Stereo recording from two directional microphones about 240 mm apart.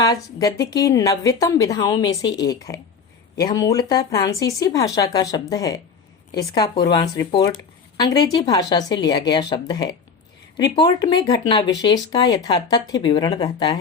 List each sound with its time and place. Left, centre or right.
0.0 s speech: centre